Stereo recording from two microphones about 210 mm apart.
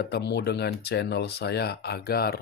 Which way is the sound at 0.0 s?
50° left (ahead or behind).